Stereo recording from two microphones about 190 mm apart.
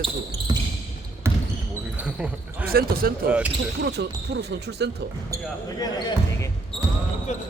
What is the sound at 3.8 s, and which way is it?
Speech, 60° right (ahead or behind).